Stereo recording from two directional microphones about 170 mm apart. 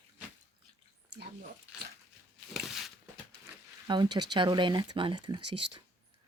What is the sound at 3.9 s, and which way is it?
Speech, 25° right (ahead or behind).